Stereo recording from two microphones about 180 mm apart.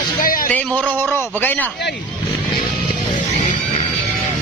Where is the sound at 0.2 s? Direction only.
50° left (ahead or behind).